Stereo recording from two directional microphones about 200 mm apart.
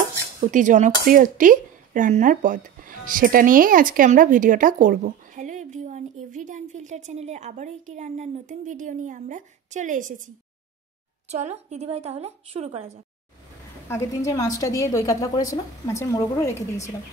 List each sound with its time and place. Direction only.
0.4 s speech: 40° right (ahead or behind)
13.8 s a woman's voice: 15° left (ahead or behind)